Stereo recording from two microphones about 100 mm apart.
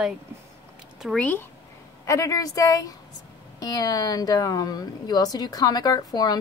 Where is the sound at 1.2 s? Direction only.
15° left (ahead or behind).